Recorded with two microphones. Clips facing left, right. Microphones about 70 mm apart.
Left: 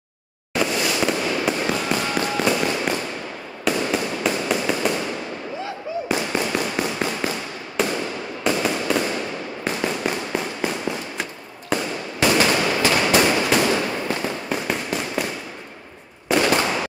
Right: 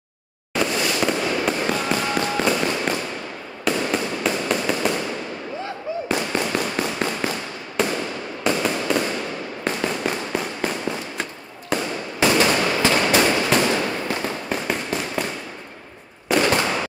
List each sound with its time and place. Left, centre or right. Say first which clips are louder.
0.6 s fireworks: even; centre
6.0 s fireworks: even; centre
12.5 s a sound: even; centre
12.8 s fireworks: even; centre
13.6 s fireworks: even; centre
16.3 s fireworks: even; centre